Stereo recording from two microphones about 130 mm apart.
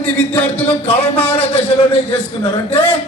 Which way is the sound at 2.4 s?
50° left (ahead or behind).